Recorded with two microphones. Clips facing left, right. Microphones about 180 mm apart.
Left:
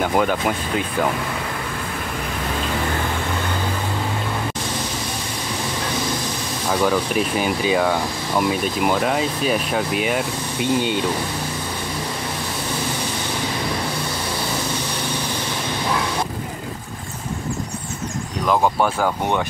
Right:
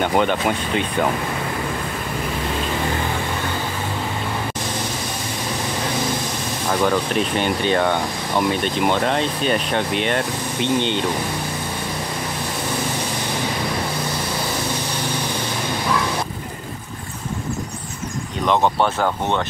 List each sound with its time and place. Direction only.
0.0 s speech: 5° left (ahead or behind)
6.7 s speech: 5° left (ahead or behind)
18.5 s speech: 5° left (ahead or behind)